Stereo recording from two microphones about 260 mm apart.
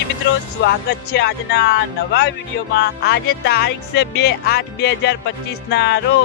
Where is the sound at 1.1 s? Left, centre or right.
Left.